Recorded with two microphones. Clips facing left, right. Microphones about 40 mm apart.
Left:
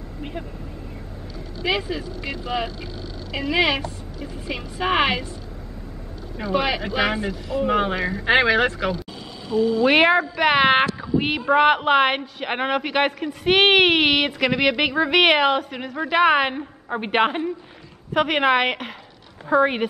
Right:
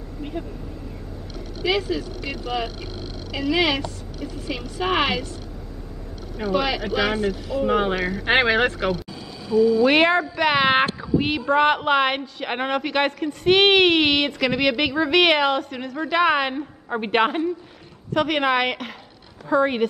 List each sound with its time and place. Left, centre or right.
0.2 s speech: left
1.6 s speech: left
6.5 s speech: left
7.5 s speech: centre
8.3 s speech: centre
9.5 s speech: left
9.8 s speech: centre